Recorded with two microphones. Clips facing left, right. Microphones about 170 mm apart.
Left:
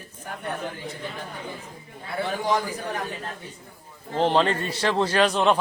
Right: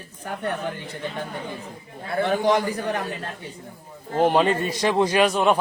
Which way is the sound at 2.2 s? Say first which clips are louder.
Right 5 dB; 65° right (ahead or behind).